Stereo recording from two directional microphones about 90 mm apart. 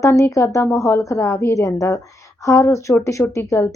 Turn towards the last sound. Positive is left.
turn(degrees=30)  # may be behind; listen again after turning